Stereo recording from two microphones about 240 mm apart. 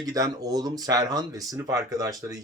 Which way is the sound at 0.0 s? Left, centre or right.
Centre.